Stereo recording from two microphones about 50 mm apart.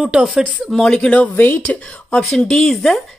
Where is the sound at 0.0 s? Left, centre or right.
Centre.